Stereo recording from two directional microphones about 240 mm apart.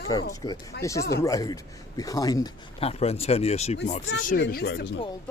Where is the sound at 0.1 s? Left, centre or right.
Centre.